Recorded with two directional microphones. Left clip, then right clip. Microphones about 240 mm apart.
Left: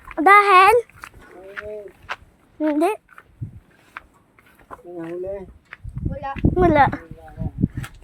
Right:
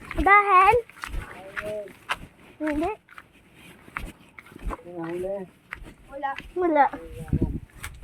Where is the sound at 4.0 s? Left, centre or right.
Right.